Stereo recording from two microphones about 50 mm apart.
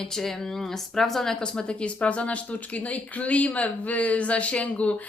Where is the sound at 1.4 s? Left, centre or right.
Centre.